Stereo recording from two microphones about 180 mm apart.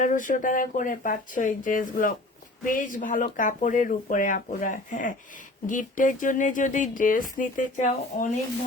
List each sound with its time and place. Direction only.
0.0 s speech: 45° left (ahead or behind)